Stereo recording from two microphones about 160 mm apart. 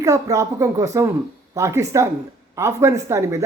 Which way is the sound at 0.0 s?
20° right (ahead or behind).